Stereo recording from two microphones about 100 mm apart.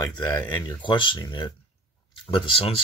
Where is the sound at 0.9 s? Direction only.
55° left (ahead or behind).